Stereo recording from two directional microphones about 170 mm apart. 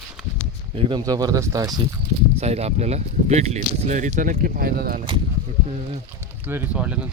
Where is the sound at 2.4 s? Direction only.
40° right (ahead or behind); by 5.0 s 60° right (ahead or behind).